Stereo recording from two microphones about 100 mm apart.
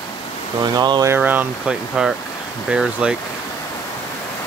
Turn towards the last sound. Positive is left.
turn(degrees=-5)  # may be behind; listen again after turning